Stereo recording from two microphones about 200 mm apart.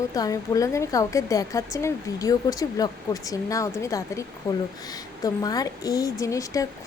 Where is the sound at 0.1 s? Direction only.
15° left (ahead or behind).